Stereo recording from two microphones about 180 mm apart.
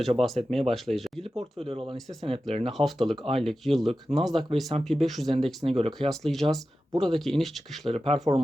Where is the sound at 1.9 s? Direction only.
Centre (ahead or behind).